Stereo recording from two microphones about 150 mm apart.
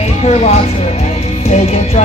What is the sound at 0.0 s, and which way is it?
Speech, 45° left (ahead or behind).